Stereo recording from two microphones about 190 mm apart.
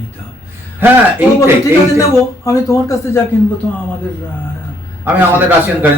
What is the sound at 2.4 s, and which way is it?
Speech, 15° left (ahead or behind).